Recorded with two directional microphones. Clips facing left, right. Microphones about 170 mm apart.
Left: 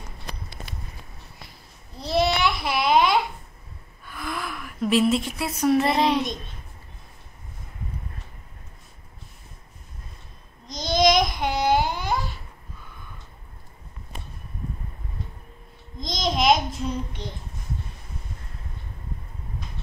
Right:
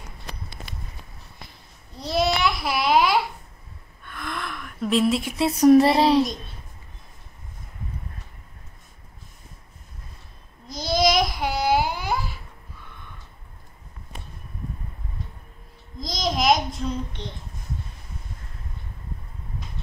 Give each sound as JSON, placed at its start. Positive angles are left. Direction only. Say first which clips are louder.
{"t": 2.0, "sound": "babbling", "louder": "even", "side_deg": 0}
{"t": 4.0, "sound": "gasp", "louder": "left 1 dB", "side_deg": 5}
{"t": 5.4, "sound": "child singing", "louder": "right 9 dB", "side_deg": -35}
{"t": 10.7, "sound": "babbling", "louder": "left 1 dB", "side_deg": -5}
{"t": 16.0, "sound": "babbling", "louder": "even", "side_deg": -5}